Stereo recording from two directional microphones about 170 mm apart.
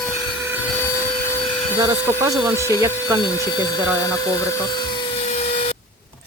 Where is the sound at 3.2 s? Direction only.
20° left (ahead or behind).